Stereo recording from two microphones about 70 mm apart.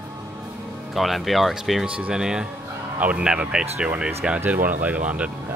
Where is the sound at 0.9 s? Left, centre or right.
Centre.